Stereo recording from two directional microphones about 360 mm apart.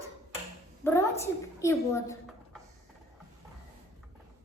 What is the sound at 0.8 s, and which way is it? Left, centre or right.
A woman's voice, centre.